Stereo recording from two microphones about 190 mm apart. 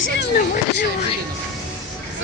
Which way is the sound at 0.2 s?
55° left (ahead or behind).